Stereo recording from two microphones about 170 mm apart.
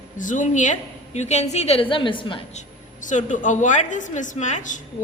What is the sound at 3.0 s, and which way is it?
A woman's voice, 45° left (ahead or behind).